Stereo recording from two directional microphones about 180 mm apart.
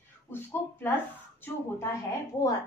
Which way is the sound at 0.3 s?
10° left (ahead or behind).